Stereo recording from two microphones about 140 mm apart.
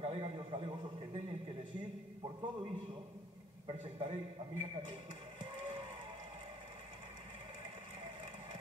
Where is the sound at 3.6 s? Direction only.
40° right (ahead or behind).